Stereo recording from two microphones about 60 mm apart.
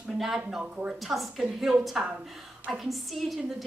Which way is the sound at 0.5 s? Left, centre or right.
Centre.